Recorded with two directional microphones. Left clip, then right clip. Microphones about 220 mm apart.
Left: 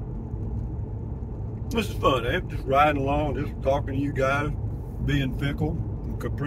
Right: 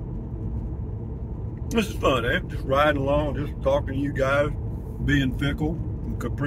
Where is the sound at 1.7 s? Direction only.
10° right (ahead or behind).